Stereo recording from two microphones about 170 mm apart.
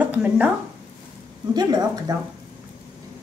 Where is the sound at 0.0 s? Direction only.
10° right (ahead or behind).